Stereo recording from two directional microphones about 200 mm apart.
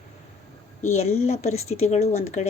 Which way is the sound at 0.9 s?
35° left (ahead or behind).